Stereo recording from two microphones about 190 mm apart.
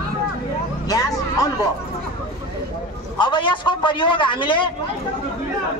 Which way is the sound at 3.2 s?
25° left (ahead or behind).